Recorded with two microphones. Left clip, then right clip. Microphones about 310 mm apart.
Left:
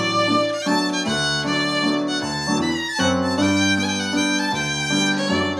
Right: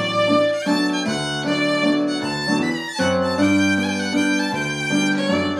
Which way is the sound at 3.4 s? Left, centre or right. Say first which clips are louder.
Right 1 dB; centre.